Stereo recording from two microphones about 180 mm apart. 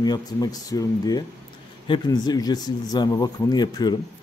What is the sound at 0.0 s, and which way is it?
Speech, 20° left (ahead or behind).